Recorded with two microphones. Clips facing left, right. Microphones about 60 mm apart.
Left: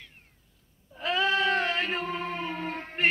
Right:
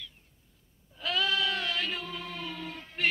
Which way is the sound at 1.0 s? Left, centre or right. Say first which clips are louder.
Left 4 dB; left.